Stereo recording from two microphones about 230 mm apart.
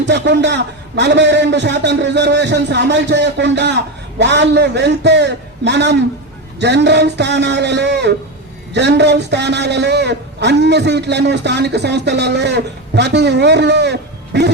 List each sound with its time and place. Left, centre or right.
0.0 s a man's voice: right